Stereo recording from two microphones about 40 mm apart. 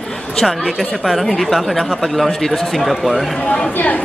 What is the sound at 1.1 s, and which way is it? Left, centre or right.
Speech, centre.